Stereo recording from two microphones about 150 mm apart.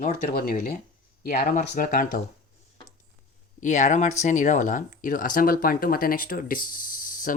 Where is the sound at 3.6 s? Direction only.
55° left (ahead or behind).